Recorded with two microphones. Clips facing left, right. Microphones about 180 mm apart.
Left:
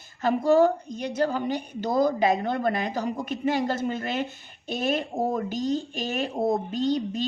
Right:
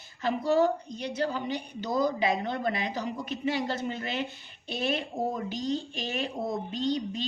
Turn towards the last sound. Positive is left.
turn(degrees=45)  # may be behind; listen again after turning